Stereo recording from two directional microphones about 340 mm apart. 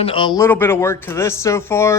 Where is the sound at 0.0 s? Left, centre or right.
Centre.